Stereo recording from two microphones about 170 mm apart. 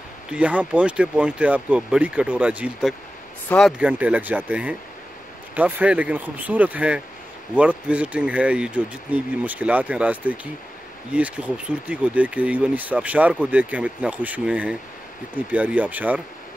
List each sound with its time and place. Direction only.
0.3 s speech: 10° right (ahead or behind)
3.4 s speech: 5° left (ahead or behind)
3.7 s speech: 10° right (ahead or behind)